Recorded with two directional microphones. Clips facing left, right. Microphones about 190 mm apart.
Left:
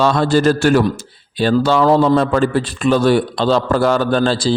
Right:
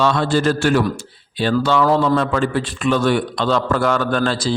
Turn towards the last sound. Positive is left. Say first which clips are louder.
# left 4 dB
turn(degrees=30)  # may be behind; listen again after turning